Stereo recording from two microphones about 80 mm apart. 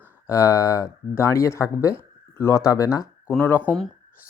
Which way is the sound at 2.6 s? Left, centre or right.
Left.